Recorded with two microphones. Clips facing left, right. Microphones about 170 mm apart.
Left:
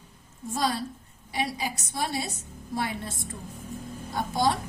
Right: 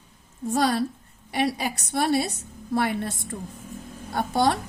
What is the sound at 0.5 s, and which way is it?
A woman's voice, 60° right (ahead or behind).